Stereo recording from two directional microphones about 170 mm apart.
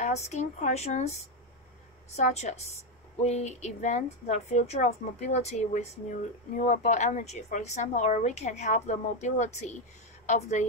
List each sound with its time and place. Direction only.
0.0 s a woman's voice: 40° left (ahead or behind)